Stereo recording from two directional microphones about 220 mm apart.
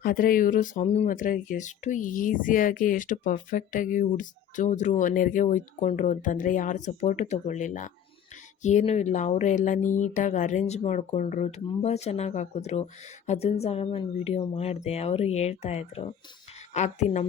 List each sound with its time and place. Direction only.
0.0 s speech: 40° left (ahead or behind)